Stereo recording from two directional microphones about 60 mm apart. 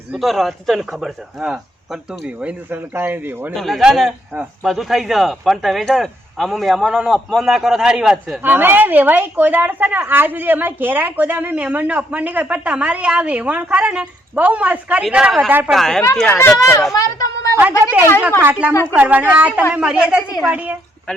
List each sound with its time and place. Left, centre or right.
0.1 s a man's voice: centre
2.2 s a woman's voice: right
2.9 s a woman's voice: right
3.5 s a man's voice: centre
6.8 s a woman's voice: centre
8.4 s a woman's voice: right
15.7 s a man's voice: centre
16.6 s speech: left
16.9 s a woman's voice: left
17.6 s a woman's voice: right